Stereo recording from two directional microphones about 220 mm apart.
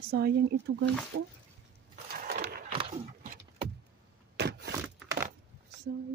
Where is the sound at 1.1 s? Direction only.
60° right (ahead or behind).